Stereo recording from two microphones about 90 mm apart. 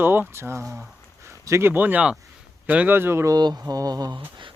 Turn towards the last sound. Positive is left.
turn(degrees=-45)  # may be behind; listen again after turning